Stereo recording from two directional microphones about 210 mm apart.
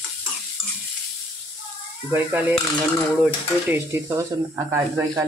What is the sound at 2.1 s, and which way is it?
Speech, 5° right (ahead or behind).